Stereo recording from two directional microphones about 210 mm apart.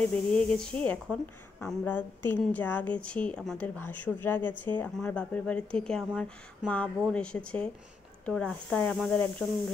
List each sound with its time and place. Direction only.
0.1 s speech: 5° left (ahead or behind)